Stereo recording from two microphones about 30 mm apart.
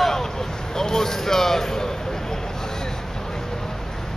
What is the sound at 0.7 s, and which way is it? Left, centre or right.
Speech, centre.